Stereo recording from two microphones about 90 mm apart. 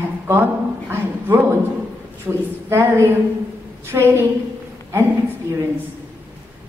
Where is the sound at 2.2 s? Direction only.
25° right (ahead or behind).